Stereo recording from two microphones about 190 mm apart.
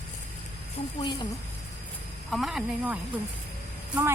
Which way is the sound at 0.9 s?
25° left (ahead or behind).